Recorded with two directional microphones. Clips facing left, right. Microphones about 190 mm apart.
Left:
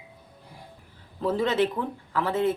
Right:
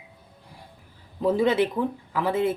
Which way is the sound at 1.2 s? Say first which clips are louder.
Right 3 dB; 10° right (ahead or behind).